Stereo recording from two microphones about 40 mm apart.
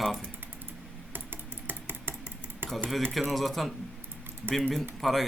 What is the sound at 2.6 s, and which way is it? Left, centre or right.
Typewriter, right.